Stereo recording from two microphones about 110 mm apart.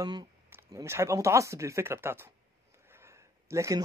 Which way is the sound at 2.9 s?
25° right (ahead or behind).